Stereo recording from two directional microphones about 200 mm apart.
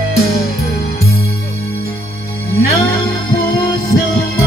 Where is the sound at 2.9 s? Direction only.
50° left (ahead or behind).